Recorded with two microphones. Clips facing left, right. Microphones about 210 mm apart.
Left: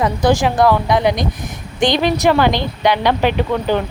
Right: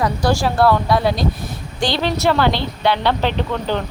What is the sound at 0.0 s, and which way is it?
A woman's voice, 20° left (ahead or behind).